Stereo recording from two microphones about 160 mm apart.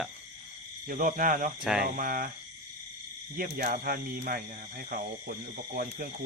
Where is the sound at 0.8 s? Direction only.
55° right (ahead or behind).